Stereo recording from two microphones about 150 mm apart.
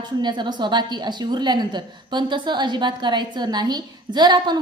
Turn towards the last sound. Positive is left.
turn(degrees=-30)  # may be behind; listen again after turning